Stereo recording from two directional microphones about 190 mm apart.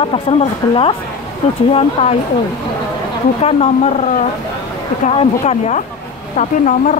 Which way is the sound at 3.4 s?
30° left (ahead or behind).